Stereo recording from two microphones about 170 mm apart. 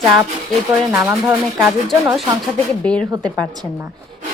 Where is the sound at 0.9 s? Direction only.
10° right (ahead or behind).